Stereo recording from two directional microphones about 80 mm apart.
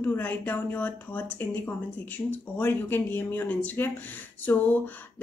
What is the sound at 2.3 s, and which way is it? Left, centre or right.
Speech, left.